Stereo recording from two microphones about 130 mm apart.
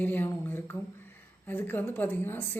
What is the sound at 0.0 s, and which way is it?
A woman's voice, 15° left (ahead or behind).